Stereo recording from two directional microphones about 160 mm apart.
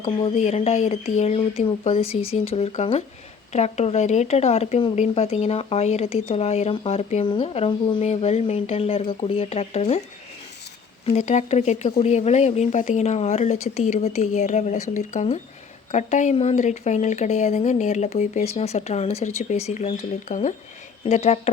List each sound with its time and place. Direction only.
0.0 s speech: 30° left (ahead or behind)
0.4 s speech: 45° left (ahead or behind)
11.0 s speech: 45° left (ahead or behind)